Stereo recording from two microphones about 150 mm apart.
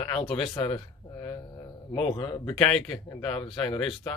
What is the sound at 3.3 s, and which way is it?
Speech, 35° left (ahead or behind).